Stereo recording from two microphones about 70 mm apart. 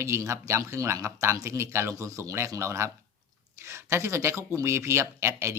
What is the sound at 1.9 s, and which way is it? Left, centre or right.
A man's voice, right.